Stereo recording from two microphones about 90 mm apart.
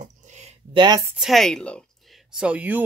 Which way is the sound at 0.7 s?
60° right (ahead or behind).